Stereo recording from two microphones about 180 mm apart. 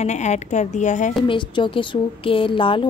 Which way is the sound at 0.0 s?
40° left (ahead or behind).